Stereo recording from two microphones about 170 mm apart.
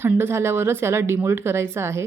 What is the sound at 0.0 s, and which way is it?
A woman's voice, 15° right (ahead or behind).